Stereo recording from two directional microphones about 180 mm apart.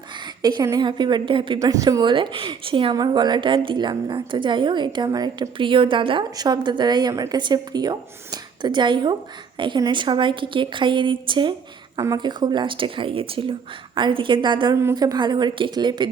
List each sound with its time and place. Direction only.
0.4 s a woman's voice: 20° right (ahead or behind)